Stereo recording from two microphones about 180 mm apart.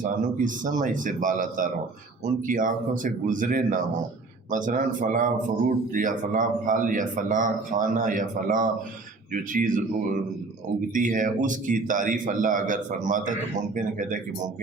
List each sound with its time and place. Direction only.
0.0 s a man's voice: 45° right (ahead or behind)
10.8 s a man's voice: 50° right (ahead or behind)